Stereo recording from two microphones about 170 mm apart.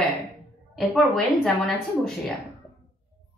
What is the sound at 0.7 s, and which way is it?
Speech, centre (ahead or behind).